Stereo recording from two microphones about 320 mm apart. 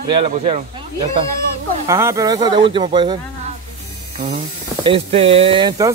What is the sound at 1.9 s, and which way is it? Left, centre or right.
Speech, centre.